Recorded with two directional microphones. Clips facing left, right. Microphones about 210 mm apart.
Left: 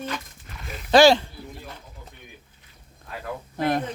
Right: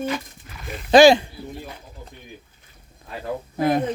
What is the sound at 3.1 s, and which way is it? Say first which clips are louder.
Speech: right 4 dB; 25° right (ahead or behind).